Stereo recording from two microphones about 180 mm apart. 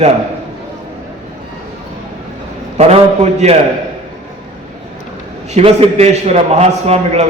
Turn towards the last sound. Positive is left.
turn(degrees=-35)  # may be behind; listen again after turning